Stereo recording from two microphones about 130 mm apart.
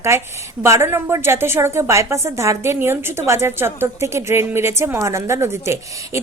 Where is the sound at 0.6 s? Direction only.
20° right (ahead or behind).